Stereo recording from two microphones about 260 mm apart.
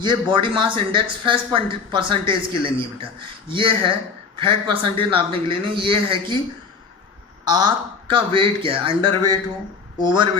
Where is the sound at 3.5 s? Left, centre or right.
Centre.